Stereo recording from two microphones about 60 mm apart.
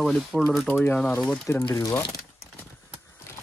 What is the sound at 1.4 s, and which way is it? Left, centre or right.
Speech, left.